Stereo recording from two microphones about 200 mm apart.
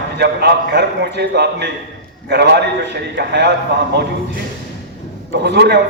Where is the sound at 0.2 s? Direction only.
55° right (ahead or behind).